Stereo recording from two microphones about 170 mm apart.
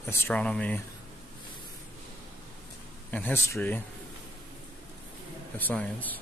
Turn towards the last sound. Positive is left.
turn(degrees=10)  # may be behind; listen again after turning